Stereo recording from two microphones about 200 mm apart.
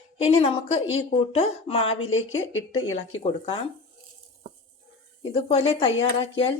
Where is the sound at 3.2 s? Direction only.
25° left (ahead or behind).